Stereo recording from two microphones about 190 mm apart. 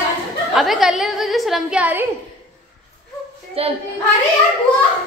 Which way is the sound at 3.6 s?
30° right (ahead or behind).